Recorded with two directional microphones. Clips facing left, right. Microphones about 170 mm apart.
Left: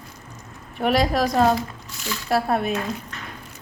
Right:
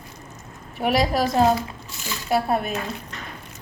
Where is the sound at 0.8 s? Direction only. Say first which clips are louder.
Left 1 dB; centre (ahead or behind).